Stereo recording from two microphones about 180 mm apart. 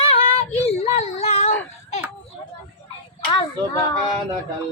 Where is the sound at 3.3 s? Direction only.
20° left (ahead or behind).